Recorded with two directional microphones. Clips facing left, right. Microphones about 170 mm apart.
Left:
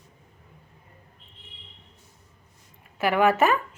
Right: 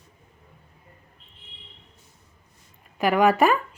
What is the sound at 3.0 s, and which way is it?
Speech, 15° right (ahead or behind).